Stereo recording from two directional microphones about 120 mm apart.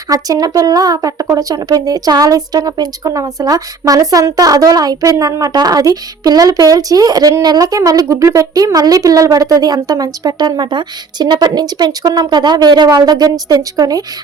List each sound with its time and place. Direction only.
0.1 s speech: 30° right (ahead or behind)